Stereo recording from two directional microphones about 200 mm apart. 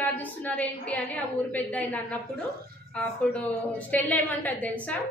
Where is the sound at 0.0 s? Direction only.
10° left (ahead or behind).